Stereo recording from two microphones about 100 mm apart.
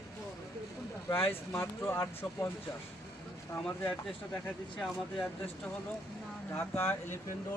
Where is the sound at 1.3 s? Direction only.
25° left (ahead or behind).